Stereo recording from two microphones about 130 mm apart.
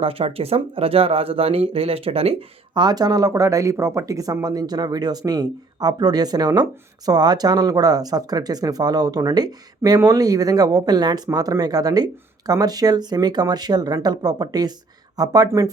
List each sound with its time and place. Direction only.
0.0 s speech: 45° right (ahead or behind)
2.7 s speech: 30° right (ahead or behind)